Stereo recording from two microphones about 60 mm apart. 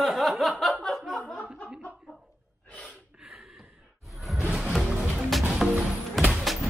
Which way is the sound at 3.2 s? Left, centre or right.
Centre.